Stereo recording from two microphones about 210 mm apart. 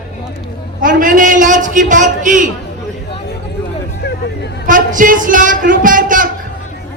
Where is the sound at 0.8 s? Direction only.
40° right (ahead or behind).